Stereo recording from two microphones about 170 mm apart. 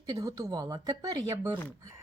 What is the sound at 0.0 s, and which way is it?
A woman's voice, 20° right (ahead or behind).